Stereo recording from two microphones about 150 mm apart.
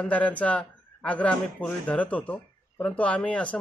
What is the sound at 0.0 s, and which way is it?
Speech, 10° left (ahead or behind).